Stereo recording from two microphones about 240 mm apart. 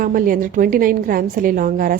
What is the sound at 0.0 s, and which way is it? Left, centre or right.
A woman's voice, right.